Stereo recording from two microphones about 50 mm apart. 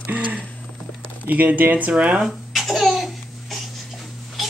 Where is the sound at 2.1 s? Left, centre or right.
Centre.